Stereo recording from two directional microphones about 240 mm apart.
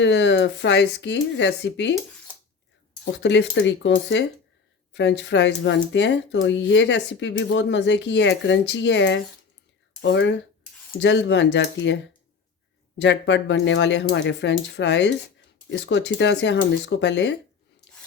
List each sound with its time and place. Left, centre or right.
0.0 s speech: left
3.0 s speech: left
13.0 s speech: left